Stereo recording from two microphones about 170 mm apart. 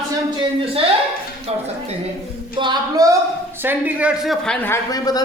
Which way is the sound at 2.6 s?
25° right (ahead or behind).